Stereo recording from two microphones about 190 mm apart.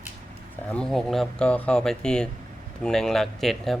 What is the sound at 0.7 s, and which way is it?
Speech, 5° left (ahead or behind).